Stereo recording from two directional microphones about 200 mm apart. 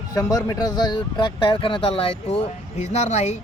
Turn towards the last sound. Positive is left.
turn(degrees=35)  # may be behind; listen again after turning